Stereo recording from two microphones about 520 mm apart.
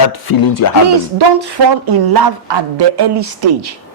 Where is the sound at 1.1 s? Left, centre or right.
Right.